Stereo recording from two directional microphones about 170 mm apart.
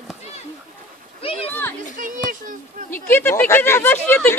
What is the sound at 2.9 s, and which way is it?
Speech, 10° left (ahead or behind).